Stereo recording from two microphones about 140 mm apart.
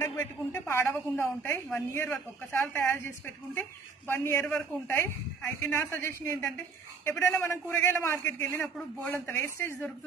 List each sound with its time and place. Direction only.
0.0 s a woman's voice: 20° left (ahead or behind)